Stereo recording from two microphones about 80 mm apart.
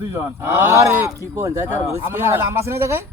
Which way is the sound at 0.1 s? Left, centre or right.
Right.